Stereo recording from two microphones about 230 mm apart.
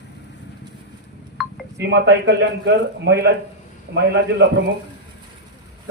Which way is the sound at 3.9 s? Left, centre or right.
Right.